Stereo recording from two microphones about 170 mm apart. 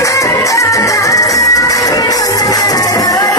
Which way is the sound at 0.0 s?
20° left (ahead or behind).